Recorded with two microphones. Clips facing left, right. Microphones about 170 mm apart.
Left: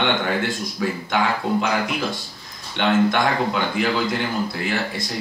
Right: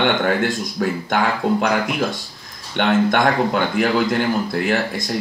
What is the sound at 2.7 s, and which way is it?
Speech, 50° right (ahead or behind).